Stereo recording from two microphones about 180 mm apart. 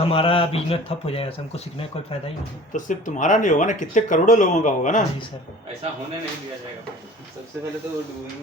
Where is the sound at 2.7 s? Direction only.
45° left (ahead or behind).